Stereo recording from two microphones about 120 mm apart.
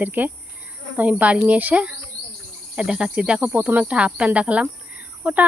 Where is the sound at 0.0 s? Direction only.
15° right (ahead or behind).